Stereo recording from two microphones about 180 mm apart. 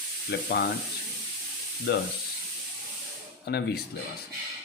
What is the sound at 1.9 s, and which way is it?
Speech, 65° left (ahead or behind).